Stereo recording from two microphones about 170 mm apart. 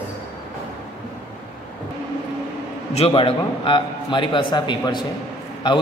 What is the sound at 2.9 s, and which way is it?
A man's voice, 35° left (ahead or behind).